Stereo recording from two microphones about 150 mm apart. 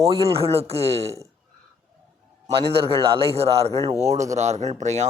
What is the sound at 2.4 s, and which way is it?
A man's voice, 40° right (ahead or behind).